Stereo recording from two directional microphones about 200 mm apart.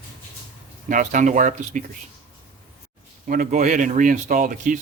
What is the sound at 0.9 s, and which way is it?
Speech, 40° right (ahead or behind).